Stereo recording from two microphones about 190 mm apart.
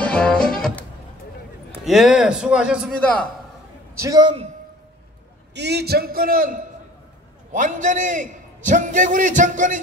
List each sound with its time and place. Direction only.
0.0 s music: 5° left (ahead or behind)
1.9 s a man's voice: centre (ahead or behind)
3.0 s a man's voice: 5° left (ahead or behind)
3.9 s a man's voice: 15° right (ahead or behind)
5.5 s a man's voice: 60° right (ahead or behind); by 9.8 s 40° right (ahead or behind)